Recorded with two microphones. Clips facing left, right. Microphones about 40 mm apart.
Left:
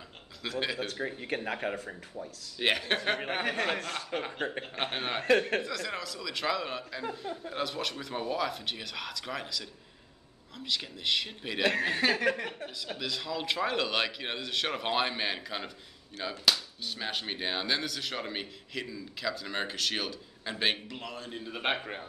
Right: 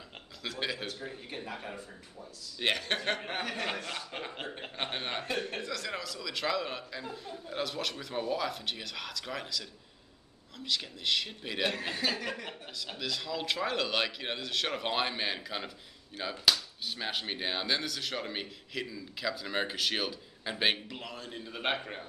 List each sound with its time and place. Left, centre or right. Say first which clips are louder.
0.4 s speech: left 3 dB; centre
0.8 s speech: left 6 dB; left
2.6 s a man's voice: left 3 dB; centre
3.4 s a man's voice: left 4 dB; left
4.7 s a man's voice: left 1 dB; centre
5.6 s speech: left 2 dB; centre
11.9 s speech: left 6 dB; left
12.7 s speech: right 3 dB; centre